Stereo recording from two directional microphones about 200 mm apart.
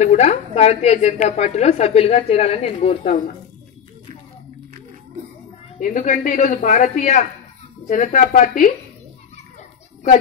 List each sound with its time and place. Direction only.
0.0 s a woman's voice: 35° left (ahead or behind)
5.8 s a woman's voice: 40° left (ahead or behind)